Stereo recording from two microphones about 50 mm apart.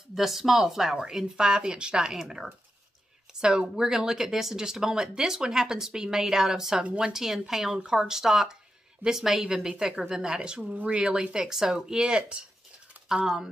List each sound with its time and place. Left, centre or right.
0.1 s speech: centre